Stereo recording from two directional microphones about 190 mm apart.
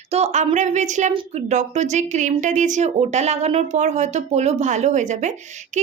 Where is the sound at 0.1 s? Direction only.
35° right (ahead or behind).